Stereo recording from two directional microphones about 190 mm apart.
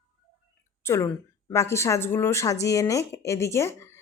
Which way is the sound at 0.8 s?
15° left (ahead or behind).